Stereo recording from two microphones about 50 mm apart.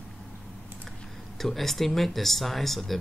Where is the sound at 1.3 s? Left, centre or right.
Centre.